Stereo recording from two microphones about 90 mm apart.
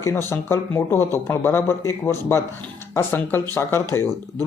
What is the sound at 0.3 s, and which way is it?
Speech, 30° left (ahead or behind).